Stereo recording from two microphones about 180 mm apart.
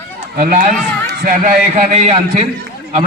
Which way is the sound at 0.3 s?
50° right (ahead or behind).